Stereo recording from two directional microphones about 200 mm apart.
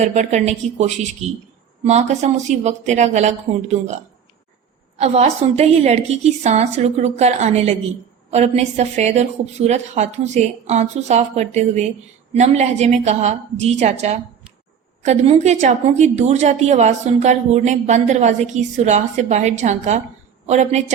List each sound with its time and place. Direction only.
0.0 s a woman's voice: 35° right (ahead or behind)